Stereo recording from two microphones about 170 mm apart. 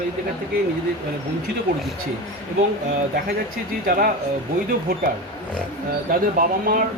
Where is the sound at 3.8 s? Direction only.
60° right (ahead or behind).